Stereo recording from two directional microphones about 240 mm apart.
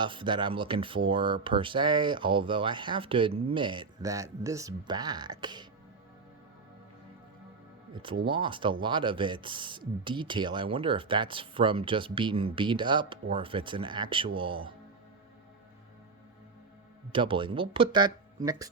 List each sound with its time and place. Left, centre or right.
0.0 s speech: centre
7.9 s speech: right
17.1 s speech: right